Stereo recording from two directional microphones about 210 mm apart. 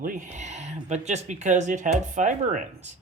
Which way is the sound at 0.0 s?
40° right (ahead or behind).